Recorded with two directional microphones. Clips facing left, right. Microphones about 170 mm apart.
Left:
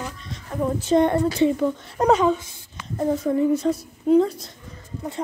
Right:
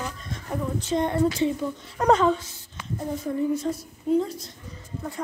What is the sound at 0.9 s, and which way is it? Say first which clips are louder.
Speech: left 4 dB; 65° left (ahead or behind).